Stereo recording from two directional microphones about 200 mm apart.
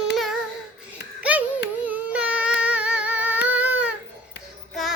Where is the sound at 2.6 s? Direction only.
5° right (ahead or behind).